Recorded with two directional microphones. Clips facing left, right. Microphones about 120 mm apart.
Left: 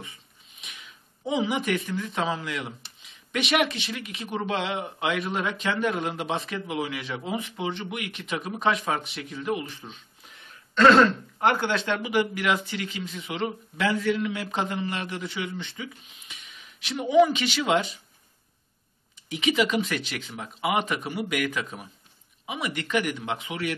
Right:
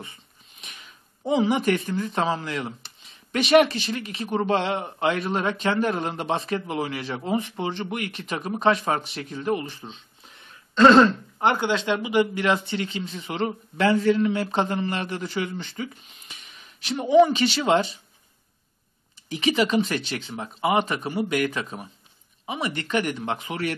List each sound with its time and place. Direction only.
0.6 s sniff: 40° right (ahead or behind)
1.3 s a man's voice: 35° right (ahead or behind)
9.8 s throat clearing: 30° right (ahead or behind)
11.3 s a man's voice: 20° right (ahead or behind)
19.2 s a man's voice: 35° right (ahead or behind)